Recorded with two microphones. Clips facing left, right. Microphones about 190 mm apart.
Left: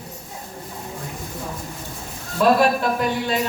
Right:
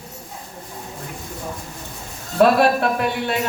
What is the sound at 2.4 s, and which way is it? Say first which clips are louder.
Speech: right 2 dB; 65° right (ahead or behind).